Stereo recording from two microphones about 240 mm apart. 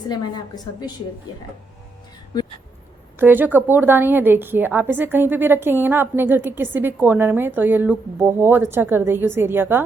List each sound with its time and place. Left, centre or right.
0.1 s a woman's voice: centre
3.2 s a woman's voice: centre